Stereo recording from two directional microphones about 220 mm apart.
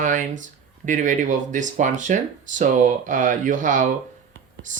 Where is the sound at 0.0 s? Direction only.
35° right (ahead or behind).